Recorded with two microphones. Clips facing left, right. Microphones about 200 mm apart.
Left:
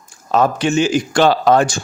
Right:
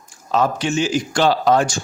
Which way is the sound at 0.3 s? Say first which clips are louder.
Left 3 dB; 55° left (ahead or behind).